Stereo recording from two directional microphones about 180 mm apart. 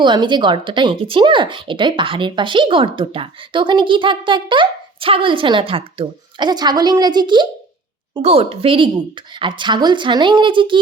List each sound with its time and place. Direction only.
0.0 s speech: 25° right (ahead or behind)